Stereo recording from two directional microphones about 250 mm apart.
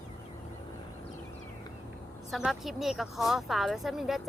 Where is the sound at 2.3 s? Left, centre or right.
Centre.